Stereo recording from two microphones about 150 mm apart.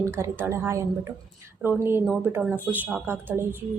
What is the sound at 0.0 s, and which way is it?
Speech, 20° right (ahead or behind).